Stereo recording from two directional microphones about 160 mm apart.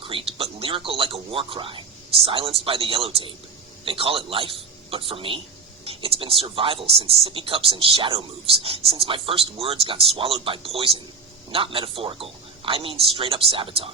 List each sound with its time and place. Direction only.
0.0 s speech: 35° right (ahead or behind)